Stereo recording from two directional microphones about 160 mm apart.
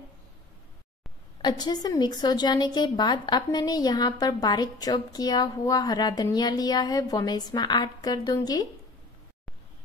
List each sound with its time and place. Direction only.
1.4 s a woman's voice: 25° left (ahead or behind)